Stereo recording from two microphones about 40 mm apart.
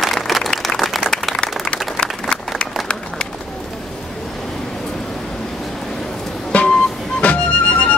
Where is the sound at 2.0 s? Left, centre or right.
Left.